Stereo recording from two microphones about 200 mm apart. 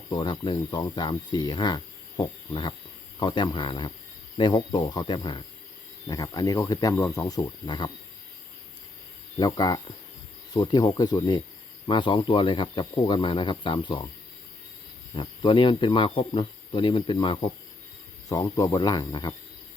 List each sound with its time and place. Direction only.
0.1 s speech: 20° left (ahead or behind)
9.4 s speech: 20° left (ahead or behind)
15.1 s speech: 25° left (ahead or behind)